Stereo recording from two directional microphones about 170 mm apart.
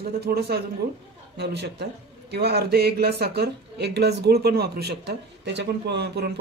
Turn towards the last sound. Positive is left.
turn(degrees=-75)  # may be behind; listen again after turning